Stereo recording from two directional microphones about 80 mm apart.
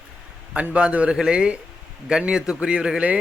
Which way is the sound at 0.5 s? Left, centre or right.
Centre.